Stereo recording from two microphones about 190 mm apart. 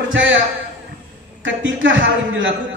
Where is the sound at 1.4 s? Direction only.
80° right.